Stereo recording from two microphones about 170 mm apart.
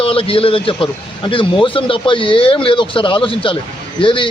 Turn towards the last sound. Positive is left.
turn(degrees=30)  # may be behind; listen again after turning